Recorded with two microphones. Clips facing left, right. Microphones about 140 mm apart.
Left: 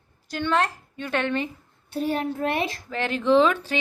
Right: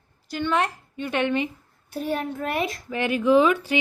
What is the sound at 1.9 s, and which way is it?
Speech, 30° left (ahead or behind).